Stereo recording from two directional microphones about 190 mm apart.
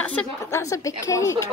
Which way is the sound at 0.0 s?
10° left (ahead or behind).